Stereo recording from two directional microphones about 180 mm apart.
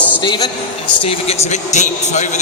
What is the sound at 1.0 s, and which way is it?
A man's voice, 35° left (ahead or behind).